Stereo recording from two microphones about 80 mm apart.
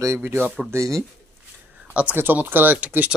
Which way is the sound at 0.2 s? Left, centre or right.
Right.